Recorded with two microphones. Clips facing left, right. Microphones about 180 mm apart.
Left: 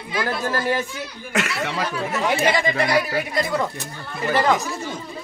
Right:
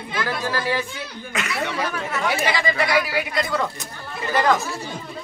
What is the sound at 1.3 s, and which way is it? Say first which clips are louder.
Speech: left 2 dB; 70° left (ahead or behind).